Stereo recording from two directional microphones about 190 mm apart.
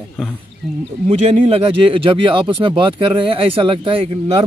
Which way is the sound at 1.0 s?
30° right (ahead or behind).